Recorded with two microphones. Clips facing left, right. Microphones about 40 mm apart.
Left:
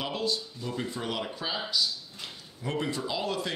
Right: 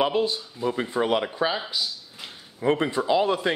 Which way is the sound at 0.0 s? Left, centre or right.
Right.